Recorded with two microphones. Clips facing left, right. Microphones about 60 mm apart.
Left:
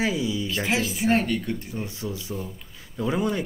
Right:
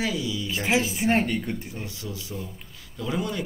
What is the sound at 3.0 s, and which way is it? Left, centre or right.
Speech, left.